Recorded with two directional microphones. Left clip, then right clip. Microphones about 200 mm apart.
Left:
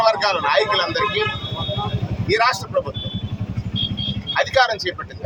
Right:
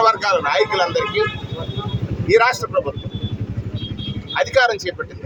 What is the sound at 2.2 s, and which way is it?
Speech, centre (ahead or behind).